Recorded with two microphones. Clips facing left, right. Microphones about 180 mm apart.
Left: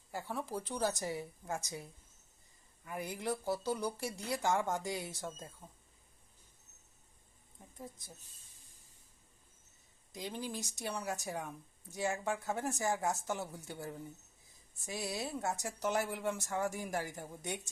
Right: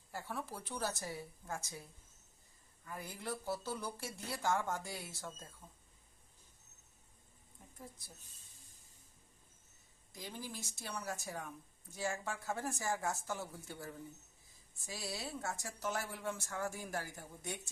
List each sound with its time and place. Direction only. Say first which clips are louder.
0.1 s speech: left 5 dB; 15° left (ahead or behind)
10.1 s speech: left 6 dB; 20° left (ahead or behind)
14.9 s speech: left 5 dB; 20° left (ahead or behind)